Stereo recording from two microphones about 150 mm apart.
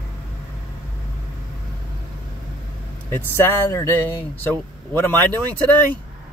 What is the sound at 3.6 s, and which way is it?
Speech, 20° left (ahead or behind).